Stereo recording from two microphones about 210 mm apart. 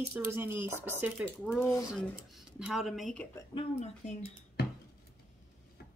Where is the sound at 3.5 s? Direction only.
25° left (ahead or behind).